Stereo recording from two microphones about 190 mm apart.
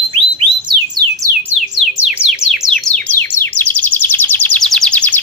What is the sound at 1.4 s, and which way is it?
Music, 5° right (ahead or behind).